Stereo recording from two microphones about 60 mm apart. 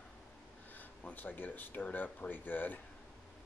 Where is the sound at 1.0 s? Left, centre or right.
Left.